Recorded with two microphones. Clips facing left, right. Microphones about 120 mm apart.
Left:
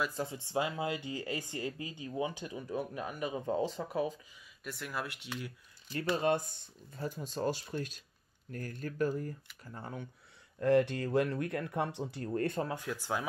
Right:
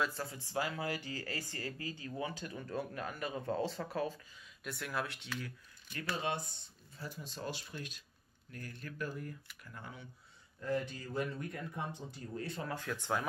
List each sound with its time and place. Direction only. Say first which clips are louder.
0.0 s speech: left 2 dB; 20° left (ahead or behind)
4.6 s speech: even; centre (ahead or behind)
6.1 s speech: left 7 dB; 45° left (ahead or behind)
10.6 s speech: left 10 dB; 70° left (ahead or behind); by 12.6 s 55° left (ahead or behind)
12.6 s speech: left 1 dB; 10° left (ahead or behind)